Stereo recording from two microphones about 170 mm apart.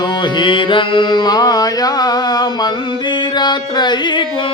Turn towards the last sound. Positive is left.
turn(degrees=25)  # may be behind; listen again after turning